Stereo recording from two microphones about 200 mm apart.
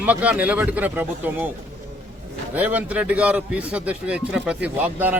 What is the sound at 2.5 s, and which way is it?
Speech, 10° right (ahead or behind).